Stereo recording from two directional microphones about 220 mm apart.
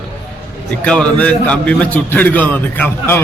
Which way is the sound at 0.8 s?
5° left (ahead or behind).